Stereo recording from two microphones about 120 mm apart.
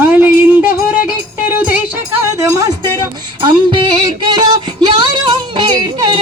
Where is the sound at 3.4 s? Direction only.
40° right (ahead or behind).